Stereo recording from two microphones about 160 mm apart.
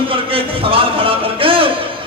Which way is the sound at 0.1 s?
35° right (ahead or behind).